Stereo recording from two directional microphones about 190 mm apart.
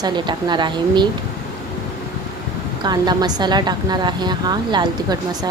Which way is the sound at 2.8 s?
20° right (ahead or behind).